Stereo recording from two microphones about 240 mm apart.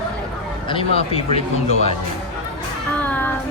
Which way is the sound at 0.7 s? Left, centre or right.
Left.